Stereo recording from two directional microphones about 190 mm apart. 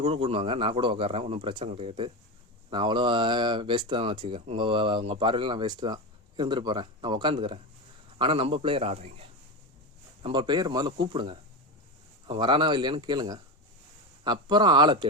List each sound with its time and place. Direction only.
0.0 s a man's voice: 30° right (ahead or behind)
10.2 s speech: 25° right (ahead or behind)